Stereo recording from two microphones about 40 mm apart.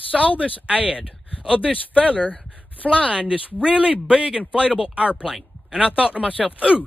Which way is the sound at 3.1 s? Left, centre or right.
Right.